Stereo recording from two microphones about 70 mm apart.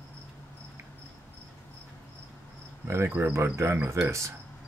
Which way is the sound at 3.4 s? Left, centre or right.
Right.